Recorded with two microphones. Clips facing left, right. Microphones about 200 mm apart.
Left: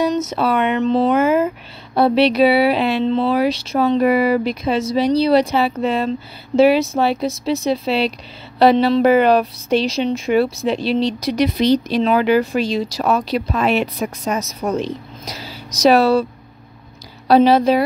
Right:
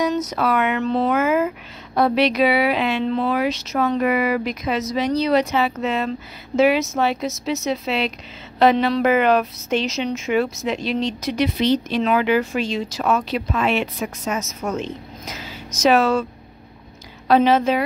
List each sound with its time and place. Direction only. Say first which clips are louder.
0.1 s a woman's voice: left 2 dB; 25° left (ahead or behind)
17.3 s a woman's voice: left 4 dB; 35° left (ahead or behind)